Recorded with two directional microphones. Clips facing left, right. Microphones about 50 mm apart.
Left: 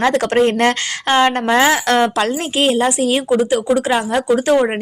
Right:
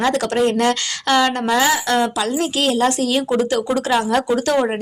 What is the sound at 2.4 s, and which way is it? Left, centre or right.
A woman's voice, left.